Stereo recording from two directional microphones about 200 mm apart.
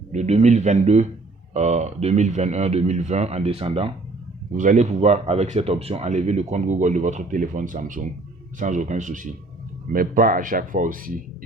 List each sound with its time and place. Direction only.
0.1 s speech: 35° right (ahead or behind)
4.5 s speech: 40° right (ahead or behind)